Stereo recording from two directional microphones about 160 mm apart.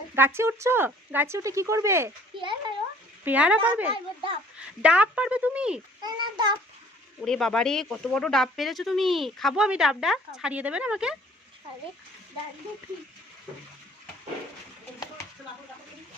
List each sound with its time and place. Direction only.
0.2 s speech: 15° right (ahead or behind)
2.4 s a sound: 30° right (ahead or behind)
3.2 s speech: 10° right (ahead or behind)
3.9 s a child's voice: 35° right (ahead or behind)
4.8 s speech: 5° right (ahead or behind)
6.0 s a child's voice: 25° right (ahead or behind)
7.3 s speech: 5° left (ahead or behind)